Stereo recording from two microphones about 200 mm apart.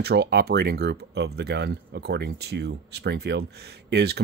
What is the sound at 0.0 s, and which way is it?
Speech, 55° right (ahead or behind).